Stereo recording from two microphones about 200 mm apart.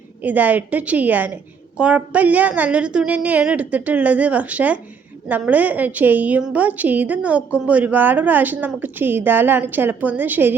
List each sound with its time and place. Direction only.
0.2 s a woman's voice: 10° right (ahead or behind)